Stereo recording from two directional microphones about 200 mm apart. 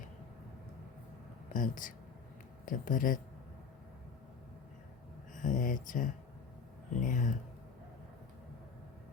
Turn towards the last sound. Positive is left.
turn(degrees=40)  # may be behind; listen again after turning